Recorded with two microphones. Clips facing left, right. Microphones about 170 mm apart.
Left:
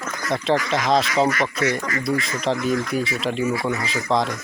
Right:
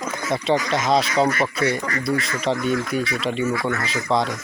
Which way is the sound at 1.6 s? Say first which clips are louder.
Even; 30° right (ahead or behind).